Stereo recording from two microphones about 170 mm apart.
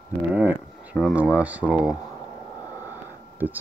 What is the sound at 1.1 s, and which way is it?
Speech, 10° right (ahead or behind).